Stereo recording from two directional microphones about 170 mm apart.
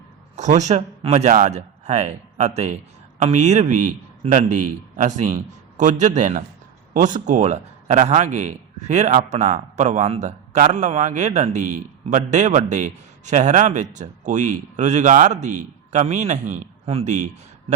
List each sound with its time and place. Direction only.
0.3 s a man's voice: 45° right (ahead or behind)